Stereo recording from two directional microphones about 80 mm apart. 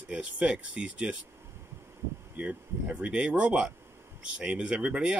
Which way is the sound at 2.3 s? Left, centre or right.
Centre.